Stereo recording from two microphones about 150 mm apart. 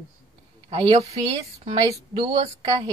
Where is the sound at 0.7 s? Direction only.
45° right (ahead or behind).